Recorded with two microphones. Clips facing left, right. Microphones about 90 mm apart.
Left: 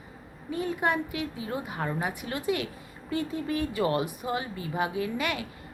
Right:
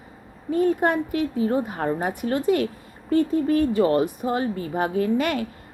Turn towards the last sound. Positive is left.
turn(degrees=-45)  # may be behind; listen again after turning